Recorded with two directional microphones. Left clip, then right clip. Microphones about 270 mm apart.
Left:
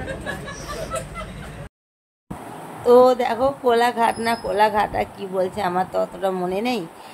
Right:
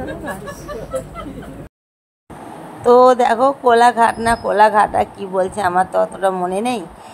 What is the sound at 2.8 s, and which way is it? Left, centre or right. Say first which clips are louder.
A woman's voice: right 4 dB; centre.